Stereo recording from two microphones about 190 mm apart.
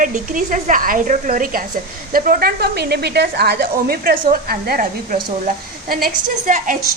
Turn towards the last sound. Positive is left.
turn(degrees=-45)  # may be behind; listen again after turning